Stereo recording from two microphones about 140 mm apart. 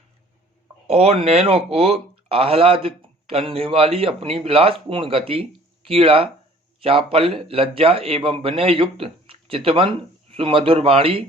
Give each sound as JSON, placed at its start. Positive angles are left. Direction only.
{"t": 0.9, "sound": "speech", "side_deg": -45}